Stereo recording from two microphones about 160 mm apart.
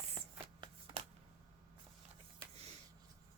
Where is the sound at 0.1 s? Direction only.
35° right (ahead or behind).